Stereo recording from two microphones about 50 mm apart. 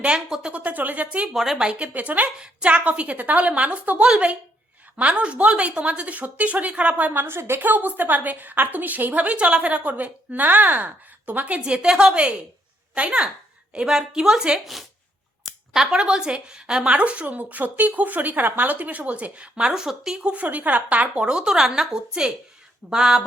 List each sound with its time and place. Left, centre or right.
0.3 s a woman's voice: centre
0.5 s a woman's voice: right
1.3 s a woman's voice: centre
1.9 s a woman's voice: right
7.1 s a woman's voice: right
7.6 s a woman's voice: right
13.7 s a woman's voice: centre
20.2 s a woman's voice: right; by 23.2 s centre